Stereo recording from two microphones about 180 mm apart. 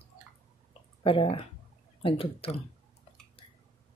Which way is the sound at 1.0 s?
30° left (ahead or behind).